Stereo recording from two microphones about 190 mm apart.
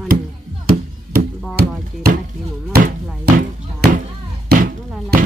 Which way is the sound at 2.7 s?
55° right (ahead or behind).